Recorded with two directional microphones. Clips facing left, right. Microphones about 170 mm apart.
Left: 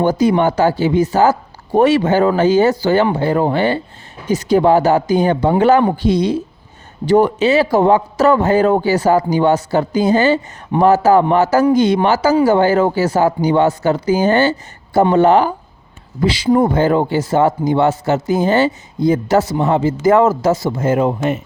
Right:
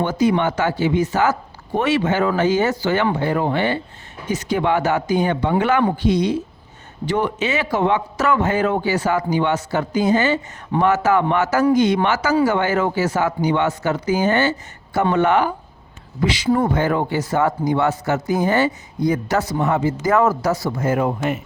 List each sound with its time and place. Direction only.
0.0 s speech: 35° left (ahead or behind)